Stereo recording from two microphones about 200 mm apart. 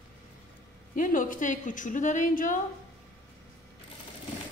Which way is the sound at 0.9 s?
40° left (ahead or behind).